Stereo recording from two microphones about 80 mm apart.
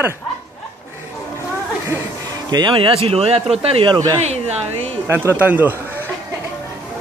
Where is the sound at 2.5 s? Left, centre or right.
Right.